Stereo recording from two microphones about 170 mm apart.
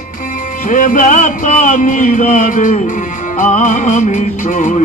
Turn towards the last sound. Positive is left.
turn(degrees=45)  # may be behind; listen again after turning